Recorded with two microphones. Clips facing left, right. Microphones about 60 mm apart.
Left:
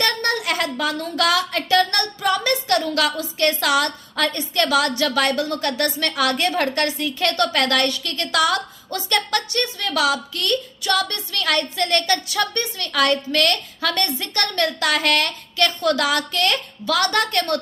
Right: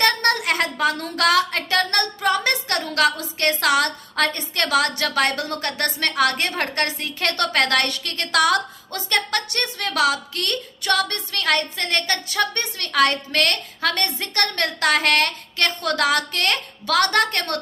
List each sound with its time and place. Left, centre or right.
0.0 s a sound: right
0.4 s a woman's voice: right
8.9 s a woman's voice: right
9.5 s a woman's voice: right
11.4 s a woman's voice: right